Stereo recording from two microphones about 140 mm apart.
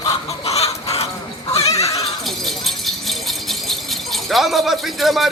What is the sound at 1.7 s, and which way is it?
Neigh, 25° left (ahead or behind).